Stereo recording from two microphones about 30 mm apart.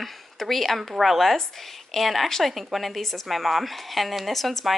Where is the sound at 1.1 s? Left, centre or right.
Centre.